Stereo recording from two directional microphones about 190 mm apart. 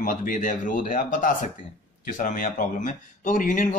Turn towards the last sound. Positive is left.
turn(degrees=45)  # may be behind; listen again after turning